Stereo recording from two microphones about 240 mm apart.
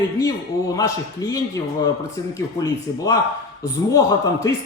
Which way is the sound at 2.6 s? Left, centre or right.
Centre.